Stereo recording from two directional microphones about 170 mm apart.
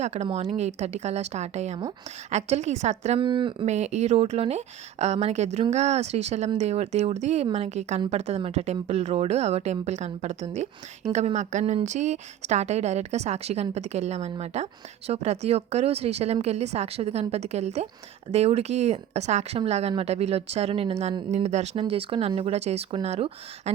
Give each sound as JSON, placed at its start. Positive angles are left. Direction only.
{"t": 0.0, "sound": "a woman's voice", "side_deg": -40}
{"t": 3.2, "sound": "speech", "side_deg": -30}
{"t": 3.7, "sound": "a woman's voice", "side_deg": -40}